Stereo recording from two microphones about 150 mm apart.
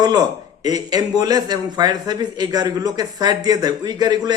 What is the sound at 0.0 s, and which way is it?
A man's voice, 25° right (ahead or behind).